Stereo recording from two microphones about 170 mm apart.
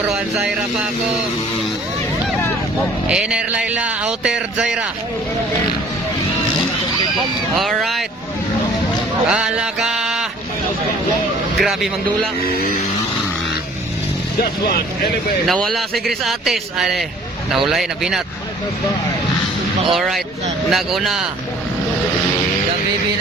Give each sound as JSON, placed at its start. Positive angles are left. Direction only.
{"t": 3.1, "sound": "speech", "side_deg": -5}
{"t": 7.5, "sound": "speech", "side_deg": 0}
{"t": 9.3, "sound": "mantra", "side_deg": -5}
{"t": 11.6, "sound": "speech", "side_deg": 0}
{"t": 12.4, "sound": "speech", "side_deg": 60}
{"t": 15.4, "sound": "speech", "side_deg": 0}
{"t": 19.9, "sound": "speech", "side_deg": 0}